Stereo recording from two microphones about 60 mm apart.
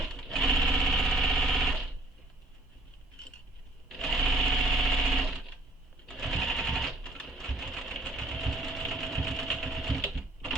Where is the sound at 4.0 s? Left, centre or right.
Centre.